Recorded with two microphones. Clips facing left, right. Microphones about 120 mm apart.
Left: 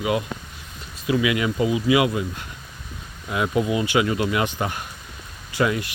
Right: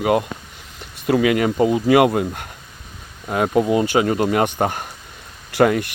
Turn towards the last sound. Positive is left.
turn(degrees=-55)  # may be behind; listen again after turning